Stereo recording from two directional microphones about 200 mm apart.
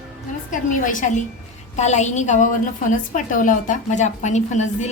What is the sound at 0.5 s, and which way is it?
A woman's voice, 40° left (ahead or behind).